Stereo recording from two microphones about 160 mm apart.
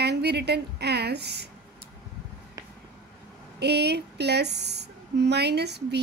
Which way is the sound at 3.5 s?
90° right.